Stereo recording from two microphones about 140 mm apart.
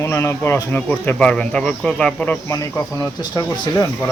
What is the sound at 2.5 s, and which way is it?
Speech, 25° left (ahead or behind).